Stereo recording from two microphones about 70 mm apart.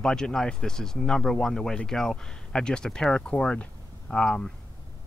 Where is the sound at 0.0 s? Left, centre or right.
Centre.